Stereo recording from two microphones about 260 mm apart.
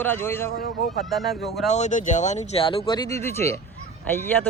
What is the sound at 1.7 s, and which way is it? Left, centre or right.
Speech, left.